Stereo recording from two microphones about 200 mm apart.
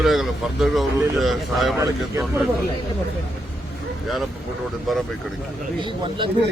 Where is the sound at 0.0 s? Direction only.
Centre (ahead or behind).